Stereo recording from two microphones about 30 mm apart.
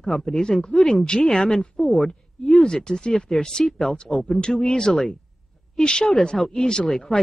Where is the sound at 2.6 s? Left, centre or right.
Left.